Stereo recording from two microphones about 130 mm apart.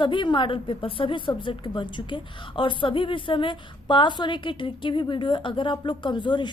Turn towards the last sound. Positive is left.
turn(degrees=35)  # may be behind; listen again after turning